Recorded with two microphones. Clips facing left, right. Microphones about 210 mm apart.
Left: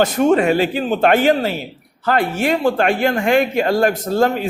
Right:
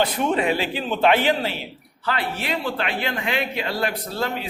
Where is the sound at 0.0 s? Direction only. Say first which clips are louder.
Left 7 dB; 45° left (ahead or behind).